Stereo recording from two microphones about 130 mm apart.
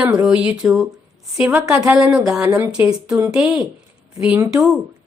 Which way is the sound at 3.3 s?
5° right (ahead or behind).